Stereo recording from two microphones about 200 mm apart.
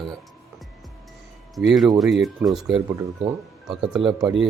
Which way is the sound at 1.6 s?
Centre (ahead or behind).